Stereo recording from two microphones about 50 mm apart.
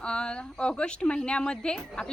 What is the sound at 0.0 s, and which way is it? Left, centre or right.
A woman's voice, centre.